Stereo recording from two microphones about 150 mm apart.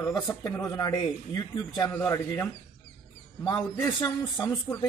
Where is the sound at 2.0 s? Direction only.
20° left (ahead or behind).